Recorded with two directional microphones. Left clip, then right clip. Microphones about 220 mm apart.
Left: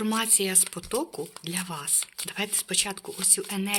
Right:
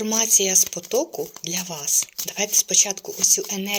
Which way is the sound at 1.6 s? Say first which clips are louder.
Right 8 dB; 20° left (ahead or behind).